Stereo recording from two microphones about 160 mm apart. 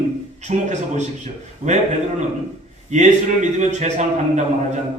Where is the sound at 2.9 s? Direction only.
45° right (ahead or behind).